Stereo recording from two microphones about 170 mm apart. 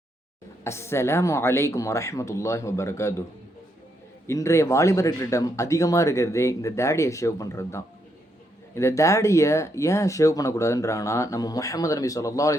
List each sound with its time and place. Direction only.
0.6 s speech: 15° left (ahead or behind)
4.3 s speech: 15° left (ahead or behind)